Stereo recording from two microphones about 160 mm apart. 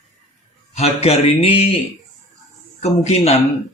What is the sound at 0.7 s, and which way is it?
Speech, 40° left (ahead or behind).